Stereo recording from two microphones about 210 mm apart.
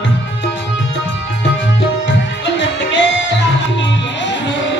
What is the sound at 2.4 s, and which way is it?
Music, 60° left (ahead or behind).